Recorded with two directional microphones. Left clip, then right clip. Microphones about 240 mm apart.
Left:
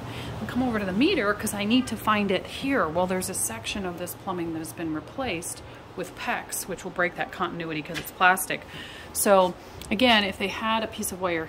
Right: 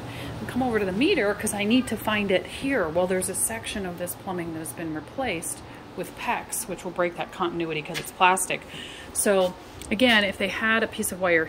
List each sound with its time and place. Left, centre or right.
0.7 s a woman's voice: centre